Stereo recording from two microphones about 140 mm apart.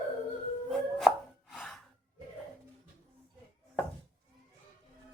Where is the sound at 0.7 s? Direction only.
Centre (ahead or behind).